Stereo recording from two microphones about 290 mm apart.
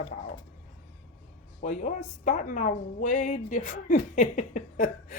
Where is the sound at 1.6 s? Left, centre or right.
Left.